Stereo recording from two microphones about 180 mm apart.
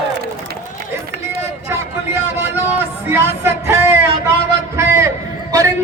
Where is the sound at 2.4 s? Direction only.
10° right (ahead or behind).